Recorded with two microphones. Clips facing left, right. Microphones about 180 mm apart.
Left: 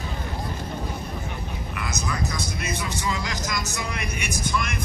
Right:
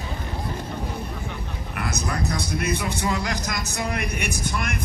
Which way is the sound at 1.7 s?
55° right (ahead or behind).